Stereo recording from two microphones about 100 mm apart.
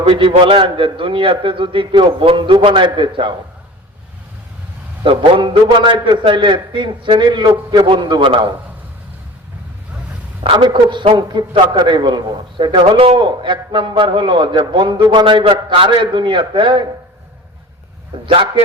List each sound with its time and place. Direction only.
0.0 s a man's voice: 65° right (ahead or behind)
5.0 s a man's voice: 55° right (ahead or behind)
10.4 s a man's voice: 55° right (ahead or behind)
18.3 s a man's voice: 75° right (ahead or behind)